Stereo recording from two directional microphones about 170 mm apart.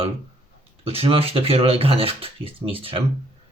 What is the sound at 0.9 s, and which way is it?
Speech, 35° right (ahead or behind).